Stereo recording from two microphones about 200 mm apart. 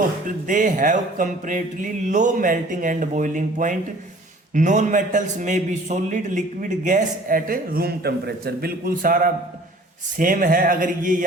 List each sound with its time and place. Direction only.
0.3 s a man's voice: 40° right (ahead or behind)